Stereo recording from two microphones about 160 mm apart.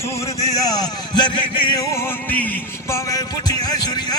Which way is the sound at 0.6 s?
25° left (ahead or behind).